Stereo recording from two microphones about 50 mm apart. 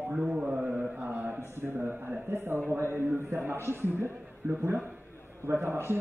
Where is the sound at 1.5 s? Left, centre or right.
Right.